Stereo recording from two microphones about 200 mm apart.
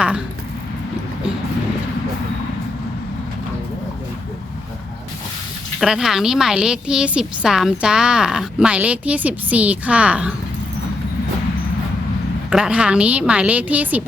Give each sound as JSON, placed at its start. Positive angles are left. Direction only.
{"t": 5.8, "sound": "a woman's voice", "side_deg": 0}
{"t": 12.5, "sound": "a woman's voice", "side_deg": -5}